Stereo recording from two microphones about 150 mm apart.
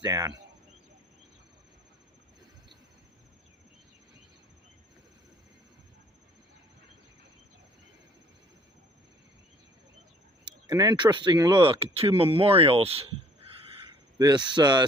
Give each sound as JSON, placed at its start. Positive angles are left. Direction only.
{"t": 0.0, "sound": "speech", "side_deg": -25}
{"t": 10.4, "sound": "speech", "side_deg": -25}
{"t": 14.2, "sound": "speech", "side_deg": -30}